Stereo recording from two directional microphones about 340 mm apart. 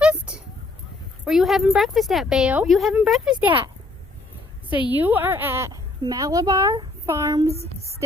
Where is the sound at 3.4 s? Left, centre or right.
Centre.